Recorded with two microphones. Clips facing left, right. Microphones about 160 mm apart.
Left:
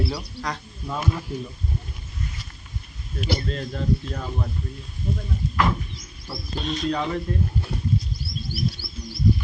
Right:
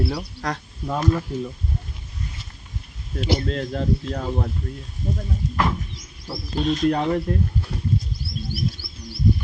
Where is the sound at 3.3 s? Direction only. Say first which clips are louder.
Right 4 dB; 90° right; by 4.5 s 65° right (ahead or behind).